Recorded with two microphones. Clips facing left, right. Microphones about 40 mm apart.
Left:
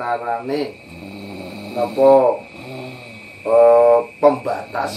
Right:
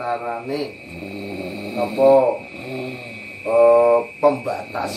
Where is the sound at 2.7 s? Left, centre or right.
Centre.